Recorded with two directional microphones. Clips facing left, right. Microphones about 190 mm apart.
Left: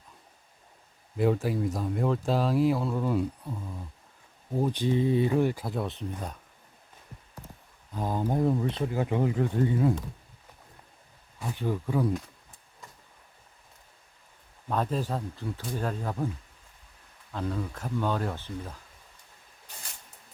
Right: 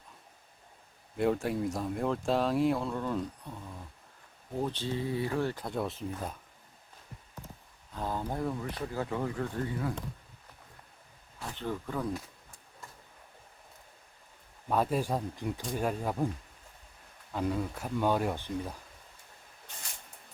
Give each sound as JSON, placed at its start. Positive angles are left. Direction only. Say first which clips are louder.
{"t": 1.1, "sound": "speech", "louder": "left 3 dB", "side_deg": 0}
{"t": 5.6, "sound": "speech", "louder": "left 1 dB", "side_deg": 0}
{"t": 7.9, "sound": "speech", "louder": "left 6 dB", "side_deg": 15}
{"t": 11.5, "sound": "speech", "louder": "left 6 dB", "side_deg": 10}
{"t": 14.7, "sound": "speech", "louder": "even", "side_deg": -10}
{"t": 17.3, "sound": "speech", "louder": "right 1 dB", "side_deg": -10}